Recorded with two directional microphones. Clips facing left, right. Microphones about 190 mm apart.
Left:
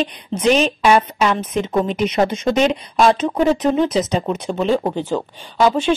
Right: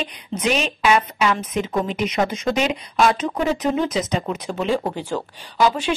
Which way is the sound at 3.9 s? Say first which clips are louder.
Left 4 dB; 25° left (ahead or behind).